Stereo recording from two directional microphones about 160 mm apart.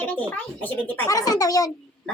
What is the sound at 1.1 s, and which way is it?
Speech, 20° left (ahead or behind).